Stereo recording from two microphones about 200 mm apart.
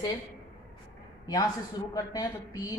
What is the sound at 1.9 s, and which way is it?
Speech, 20° left (ahead or behind).